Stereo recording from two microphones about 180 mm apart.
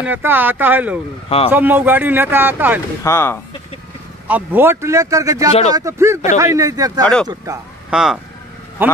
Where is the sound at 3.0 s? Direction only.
15° left (ahead or behind).